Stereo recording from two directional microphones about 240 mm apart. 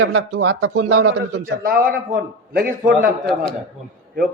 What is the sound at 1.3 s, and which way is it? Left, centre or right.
Speech, right.